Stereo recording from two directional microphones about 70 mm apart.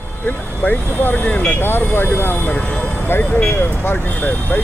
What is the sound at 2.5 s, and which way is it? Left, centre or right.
Speech, centre.